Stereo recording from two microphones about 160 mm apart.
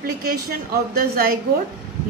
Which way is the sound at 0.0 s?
70° right (ahead or behind).